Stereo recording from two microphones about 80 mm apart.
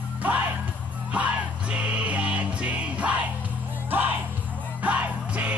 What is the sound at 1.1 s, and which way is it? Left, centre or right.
Music, centre.